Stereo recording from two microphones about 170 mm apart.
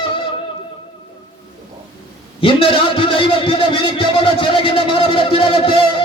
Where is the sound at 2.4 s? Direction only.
35° left (ahead or behind).